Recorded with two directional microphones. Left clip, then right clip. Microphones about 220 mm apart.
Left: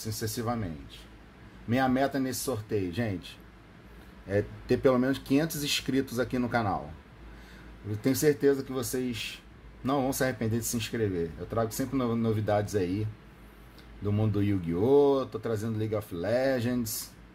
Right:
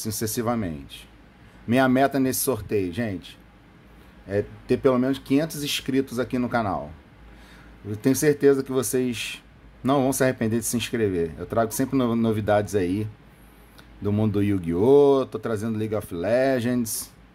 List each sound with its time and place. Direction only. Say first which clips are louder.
0.0 s speech: right 7 dB; 30° right (ahead or behind)
8.0 s speech: right 5 dB; 20° right (ahead or behind)
14.0 s speech: right 6 dB; 25° right (ahead or behind)